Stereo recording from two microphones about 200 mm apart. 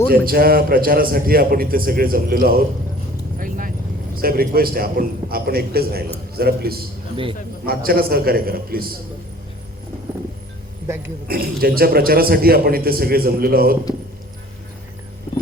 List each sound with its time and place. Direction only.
0.1 s a man's voice: 50° right (ahead or behind)
3.3 s vehicle: 45° right (ahead or behind)
4.2 s a man's voice: 50° right (ahead or behind)
10.8 s a man's voice: 10° right (ahead or behind)
11.3 s a man's voice: 50° right (ahead or behind)